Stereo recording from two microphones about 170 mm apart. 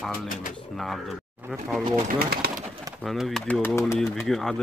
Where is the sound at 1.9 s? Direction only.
60° right (ahead or behind).